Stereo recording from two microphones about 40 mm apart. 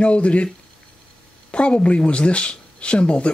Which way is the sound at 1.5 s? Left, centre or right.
Left.